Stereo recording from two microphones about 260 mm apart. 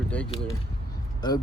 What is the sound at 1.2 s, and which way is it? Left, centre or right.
Speech, centre.